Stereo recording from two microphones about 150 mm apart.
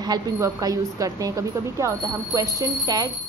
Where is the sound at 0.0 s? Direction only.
25° right (ahead or behind).